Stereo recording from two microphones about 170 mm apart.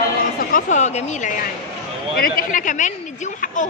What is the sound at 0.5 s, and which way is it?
Speech, 45° left (ahead or behind).